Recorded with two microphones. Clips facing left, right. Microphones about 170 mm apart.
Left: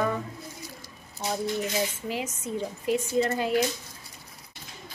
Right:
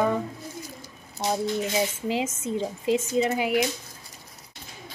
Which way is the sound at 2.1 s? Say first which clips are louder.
Right 5 dB; 90° right.